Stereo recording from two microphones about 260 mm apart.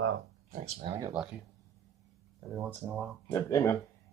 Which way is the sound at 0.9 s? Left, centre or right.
Centre.